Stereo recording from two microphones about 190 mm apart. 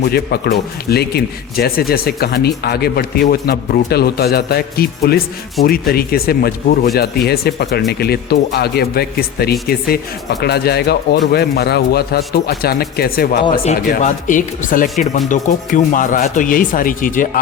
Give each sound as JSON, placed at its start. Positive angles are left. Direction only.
{"t": 0.1, "sound": "speech", "side_deg": 55}
{"t": 13.4, "sound": "speech", "side_deg": 30}
{"t": 13.7, "sound": "speech", "side_deg": 45}